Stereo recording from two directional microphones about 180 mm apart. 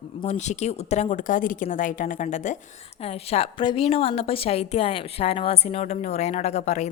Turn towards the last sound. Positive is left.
turn(degrees=40)  # may be behind; listen again after turning